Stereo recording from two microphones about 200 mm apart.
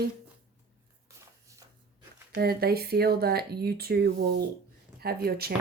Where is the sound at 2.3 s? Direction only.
50° right (ahead or behind).